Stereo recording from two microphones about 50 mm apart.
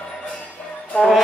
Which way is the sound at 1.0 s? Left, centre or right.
Centre.